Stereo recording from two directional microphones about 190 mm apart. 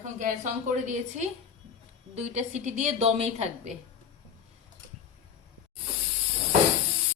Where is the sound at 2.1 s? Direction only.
40° right (ahead or behind).